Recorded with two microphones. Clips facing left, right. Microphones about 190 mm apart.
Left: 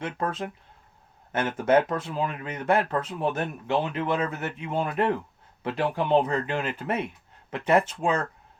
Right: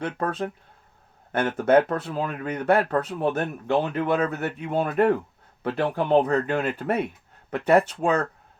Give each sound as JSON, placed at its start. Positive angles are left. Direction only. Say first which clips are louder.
{"t": 0.0, "sound": "speech", "louder": "right 3 dB", "side_deg": -40}
{"t": 1.3, "sound": "speech", "louder": "right 3 dB", "side_deg": -60}